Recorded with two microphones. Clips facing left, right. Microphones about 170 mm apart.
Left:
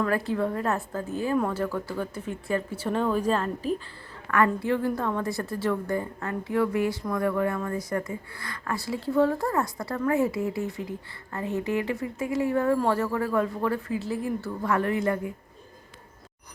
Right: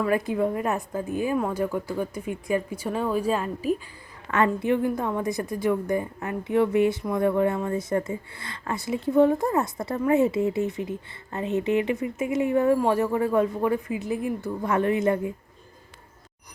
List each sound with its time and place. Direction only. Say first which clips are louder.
0.0 s speech: right 2 dB; 15° right (ahead or behind)
4.3 s a woman's voice: right 1 dB; 20° right (ahead or behind)